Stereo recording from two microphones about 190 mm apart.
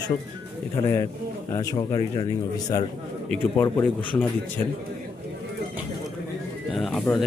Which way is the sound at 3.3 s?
10° left (ahead or behind).